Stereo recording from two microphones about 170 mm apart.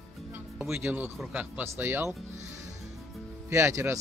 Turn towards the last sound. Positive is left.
turn(degrees=-15)  # may be behind; listen again after turning